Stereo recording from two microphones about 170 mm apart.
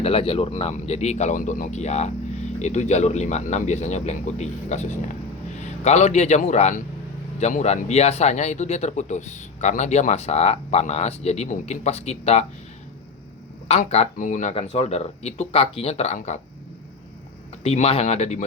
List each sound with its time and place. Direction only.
0.0 s a man's voice: 35° left (ahead or behind)
13.7 s speech: 40° left (ahead or behind)
17.6 s speech: 40° left (ahead or behind)